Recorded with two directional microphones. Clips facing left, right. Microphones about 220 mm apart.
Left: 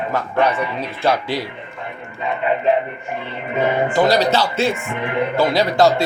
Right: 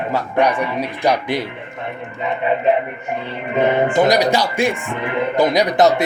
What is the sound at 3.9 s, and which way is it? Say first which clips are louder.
A man's voice: right 1 dB; 20° right (ahead or behind).